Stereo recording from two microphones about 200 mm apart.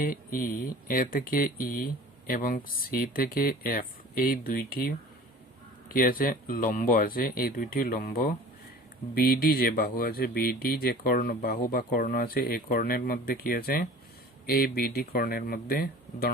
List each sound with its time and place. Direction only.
0.0 s speech: 45° left (ahead or behind)